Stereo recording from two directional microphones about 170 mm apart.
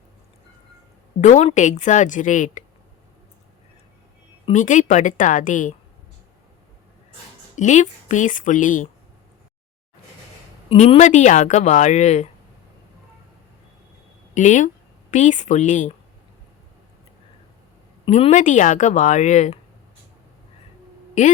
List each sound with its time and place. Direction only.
1.2 s speech: 40° left (ahead or behind)
4.5 s speech: 50° left (ahead or behind)
7.5 s speech: 45° left (ahead or behind)
10.7 s speech: 35° left (ahead or behind)
14.3 s speech: 50° left (ahead or behind)
18.1 s speech: 45° left (ahead or behind)